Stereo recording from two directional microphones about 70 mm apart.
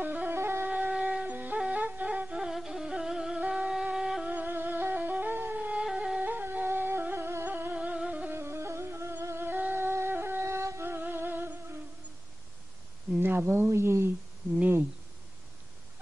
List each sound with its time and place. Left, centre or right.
0.0 s wind instrument: right
0.4 s wind instrument: right
0.7 s wind instrument: centre
1.6 s music: centre
4.3 s music: right
6.3 s music: right
8.3 s music: right
13.2 s speech: right